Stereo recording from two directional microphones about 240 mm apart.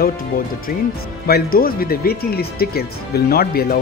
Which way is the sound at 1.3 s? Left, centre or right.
Left.